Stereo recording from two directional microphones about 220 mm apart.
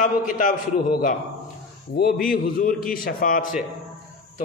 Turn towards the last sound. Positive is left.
turn(degrees=40)  # may be behind; listen again after turning